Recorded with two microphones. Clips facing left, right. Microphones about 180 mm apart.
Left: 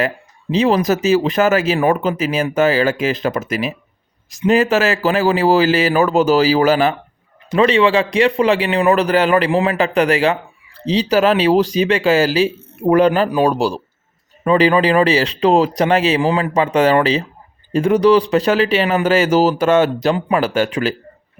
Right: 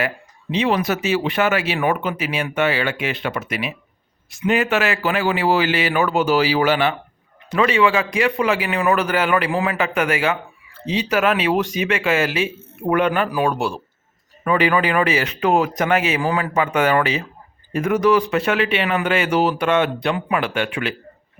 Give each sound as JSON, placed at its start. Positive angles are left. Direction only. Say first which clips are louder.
{"t": 0.5, "sound": "speech", "louder": "left 5 dB", "side_deg": 40}